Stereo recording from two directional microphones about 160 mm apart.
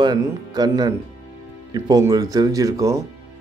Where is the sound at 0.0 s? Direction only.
25° right (ahead or behind).